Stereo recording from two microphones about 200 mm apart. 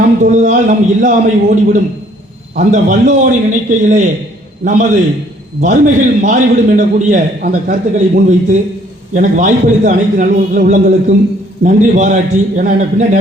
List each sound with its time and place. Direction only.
0.2 s a man's voice: 40° right (ahead or behind)